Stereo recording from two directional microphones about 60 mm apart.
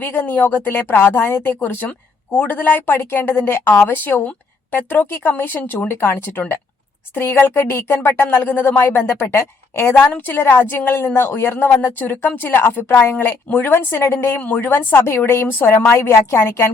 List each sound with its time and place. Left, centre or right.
0.0 s speech: left
2.3 s a woman's voice: left
2.6 s speech: left
5.9 s a woman's voice: left
14.4 s a woman's voice: left